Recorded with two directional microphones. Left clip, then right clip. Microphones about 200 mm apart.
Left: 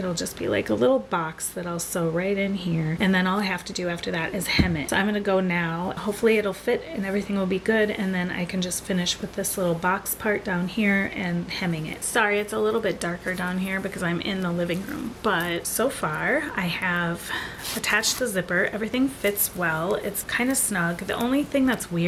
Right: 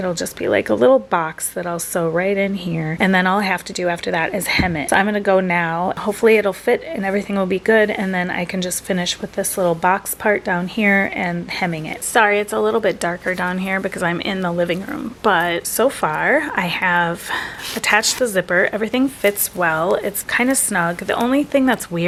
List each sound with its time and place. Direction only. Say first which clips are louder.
0.0 s speech: right 7 dB; 10° right (ahead or behind)
17.7 s speech: right 7 dB; 10° right (ahead or behind)